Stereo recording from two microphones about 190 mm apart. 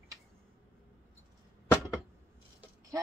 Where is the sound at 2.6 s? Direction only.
15° right (ahead or behind).